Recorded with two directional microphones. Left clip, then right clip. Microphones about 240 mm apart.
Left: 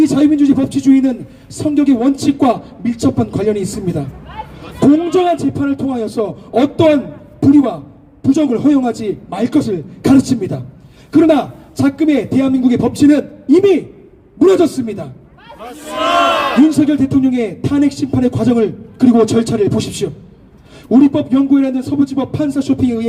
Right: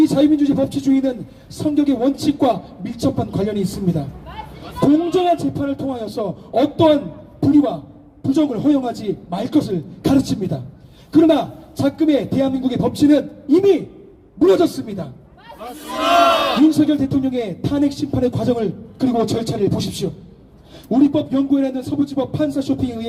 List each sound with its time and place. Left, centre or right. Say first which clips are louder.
0.0 s speech: left 3 dB; left
4.8 s speech: left 4 dB; left
16.6 s speech: left 3 dB; left